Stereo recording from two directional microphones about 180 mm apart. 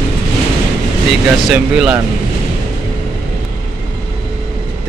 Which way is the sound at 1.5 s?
5° right (ahead or behind).